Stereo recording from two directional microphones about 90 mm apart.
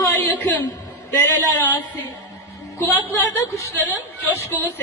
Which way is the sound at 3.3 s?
35° left (ahead or behind).